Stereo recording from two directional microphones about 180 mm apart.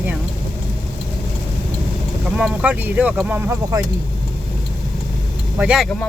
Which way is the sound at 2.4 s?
5° right (ahead or behind).